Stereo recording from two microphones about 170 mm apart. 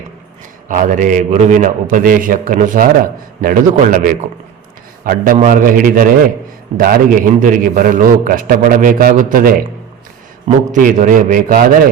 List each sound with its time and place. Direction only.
0.7 s a man's voice: 50° right (ahead or behind)
10.7 s a man's voice: 50° right (ahead or behind)